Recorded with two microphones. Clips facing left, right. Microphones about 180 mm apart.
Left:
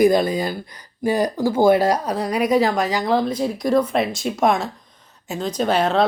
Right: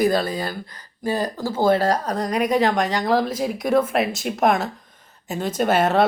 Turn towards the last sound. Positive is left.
turn(degrees=-5)  # may be behind; listen again after turning